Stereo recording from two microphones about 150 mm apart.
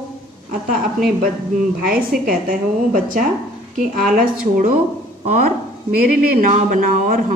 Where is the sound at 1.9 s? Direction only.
70° right (ahead or behind).